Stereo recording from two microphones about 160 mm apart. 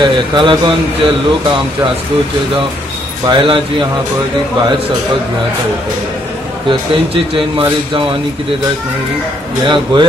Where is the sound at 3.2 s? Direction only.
30° right (ahead or behind).